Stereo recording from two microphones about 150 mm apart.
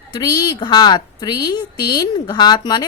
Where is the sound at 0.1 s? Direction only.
25° left (ahead or behind).